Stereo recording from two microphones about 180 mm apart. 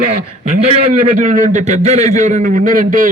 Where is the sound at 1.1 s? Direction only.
45° right (ahead or behind).